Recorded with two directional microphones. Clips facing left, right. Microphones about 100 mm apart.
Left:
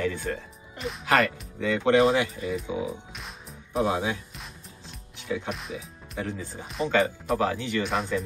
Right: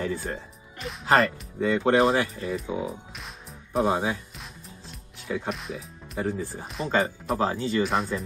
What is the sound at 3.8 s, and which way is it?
Speech, 45° right (ahead or behind).